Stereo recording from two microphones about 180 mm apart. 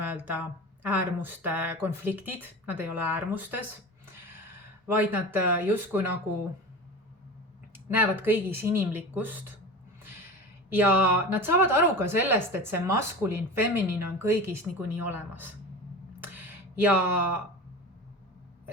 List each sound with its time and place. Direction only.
0.0 s speech: 10° right (ahead or behind)
4.9 s speech: 10° right (ahead or behind)
7.9 s speech: 10° right (ahead or behind)
10.7 s speech: 10° right (ahead or behind)
16.8 s speech: 10° right (ahead or behind)